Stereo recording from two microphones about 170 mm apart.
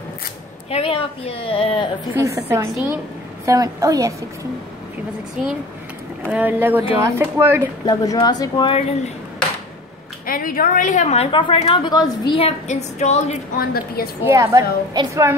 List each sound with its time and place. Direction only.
0.7 s a woman's voice: 35° left (ahead or behind)
2.1 s a woman's voice: 15° right (ahead or behind)
5.4 s speech: 5° right (ahead or behind)
7.8 s speech: 20° left (ahead or behind); by 9.1 s 35° left (ahead or behind)
10.2 s a woman's voice: 55° left (ahead or behind); by 12.4 s 25° left (ahead or behind)
12.4 s a woman's voice: 40° left (ahead or behind)
14.2 s speech: 15° right (ahead or behind)